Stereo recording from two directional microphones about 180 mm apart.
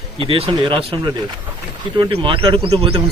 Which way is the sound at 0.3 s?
30° right (ahead or behind).